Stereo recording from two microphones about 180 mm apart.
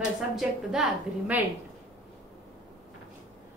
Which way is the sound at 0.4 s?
5° right (ahead or behind).